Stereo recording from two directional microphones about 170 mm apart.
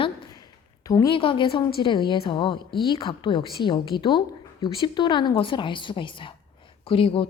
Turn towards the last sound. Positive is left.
turn(degrees=30)  # may be behind; listen again after turning